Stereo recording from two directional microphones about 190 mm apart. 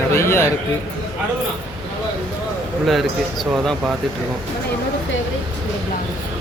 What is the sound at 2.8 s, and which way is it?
Speech, centre (ahead or behind).